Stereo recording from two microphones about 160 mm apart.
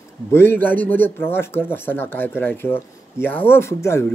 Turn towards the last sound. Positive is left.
turn(degrees=15)  # may be behind; listen again after turning